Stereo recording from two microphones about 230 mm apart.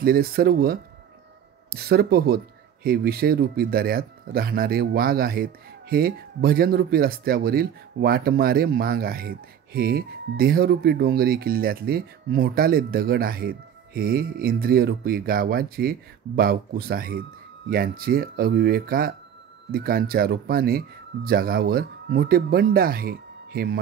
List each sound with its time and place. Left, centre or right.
0.0 s speech: right